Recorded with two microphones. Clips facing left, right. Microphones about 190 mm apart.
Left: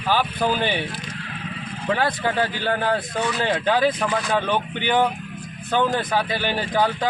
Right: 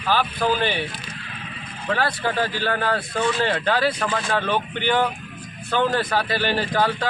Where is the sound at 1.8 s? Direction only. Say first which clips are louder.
Left 1 dB; 15° left (ahead or behind).